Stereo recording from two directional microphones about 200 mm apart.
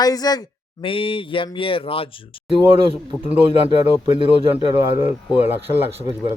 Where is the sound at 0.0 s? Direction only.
20° left (ahead or behind).